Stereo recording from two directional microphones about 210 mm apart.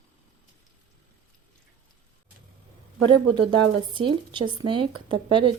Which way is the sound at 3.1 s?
20° right (ahead or behind).